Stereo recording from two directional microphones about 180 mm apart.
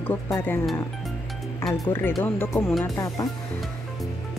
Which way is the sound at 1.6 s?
15° left (ahead or behind).